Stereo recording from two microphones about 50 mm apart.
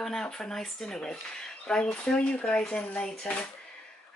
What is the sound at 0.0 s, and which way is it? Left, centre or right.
Speech, centre.